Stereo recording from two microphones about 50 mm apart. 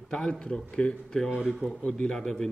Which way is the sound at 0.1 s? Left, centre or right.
Centre.